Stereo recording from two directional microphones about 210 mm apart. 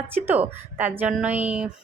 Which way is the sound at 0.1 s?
10° right (ahead or behind).